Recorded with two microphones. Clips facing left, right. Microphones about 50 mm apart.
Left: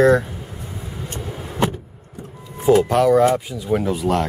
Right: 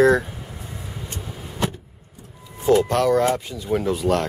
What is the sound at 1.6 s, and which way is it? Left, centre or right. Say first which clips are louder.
Vehicle: left 5 dB; left.